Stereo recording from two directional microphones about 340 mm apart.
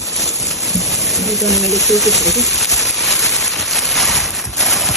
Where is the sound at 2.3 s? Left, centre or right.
Centre.